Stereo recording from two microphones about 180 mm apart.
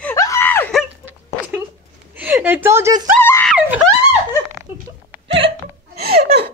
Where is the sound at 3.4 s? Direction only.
5° right (ahead or behind).